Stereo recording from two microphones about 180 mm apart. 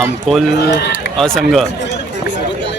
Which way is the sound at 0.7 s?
65° left (ahead or behind).